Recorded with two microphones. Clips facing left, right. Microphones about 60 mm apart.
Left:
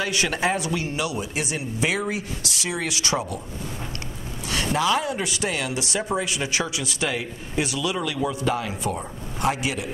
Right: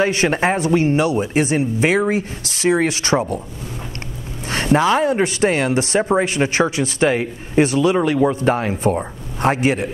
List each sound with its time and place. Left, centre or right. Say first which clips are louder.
0.0 s speech: right 7 dB; right
4.5 s speech: right 7 dB; right